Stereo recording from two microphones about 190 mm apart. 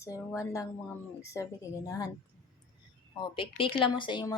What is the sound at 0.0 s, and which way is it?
Speech, 15° left (ahead or behind).